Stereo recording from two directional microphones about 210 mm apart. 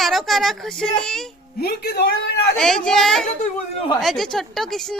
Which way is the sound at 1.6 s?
50° left (ahead or behind).